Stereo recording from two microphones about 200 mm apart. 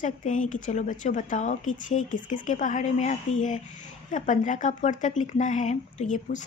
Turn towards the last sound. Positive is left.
turn(degrees=40)  # may be behind; listen again after turning